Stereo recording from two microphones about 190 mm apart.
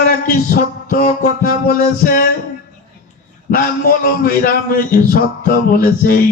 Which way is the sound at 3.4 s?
45° left (ahead or behind).